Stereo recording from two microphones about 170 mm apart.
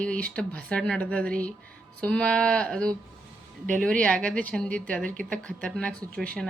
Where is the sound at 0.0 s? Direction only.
5° left (ahead or behind).